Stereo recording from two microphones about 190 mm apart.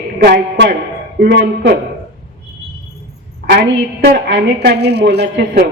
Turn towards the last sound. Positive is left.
turn(degrees=-60)  # may be behind; listen again after turning